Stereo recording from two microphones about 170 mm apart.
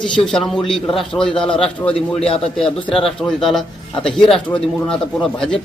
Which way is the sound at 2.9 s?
5° left (ahead or behind).